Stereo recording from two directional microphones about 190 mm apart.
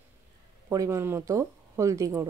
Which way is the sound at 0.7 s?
15° right (ahead or behind).